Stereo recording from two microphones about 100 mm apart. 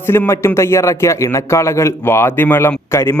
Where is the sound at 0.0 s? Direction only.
25° left (ahead or behind).